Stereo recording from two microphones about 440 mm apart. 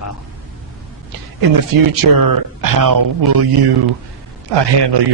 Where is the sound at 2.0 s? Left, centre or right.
Right.